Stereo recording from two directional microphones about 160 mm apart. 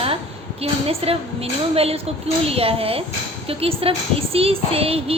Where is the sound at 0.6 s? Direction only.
40° right (ahead or behind).